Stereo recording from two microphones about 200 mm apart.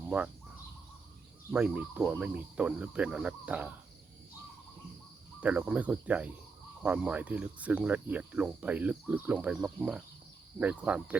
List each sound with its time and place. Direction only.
0.1 s speech: 5° right (ahead or behind)
1.5 s speech: 5° right (ahead or behind)
5.4 s speech: 5° right (ahead or behind)